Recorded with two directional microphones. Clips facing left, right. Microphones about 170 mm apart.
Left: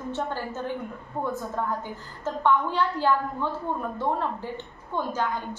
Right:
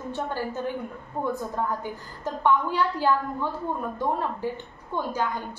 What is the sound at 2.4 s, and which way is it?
A woman's voice, 10° right (ahead or behind).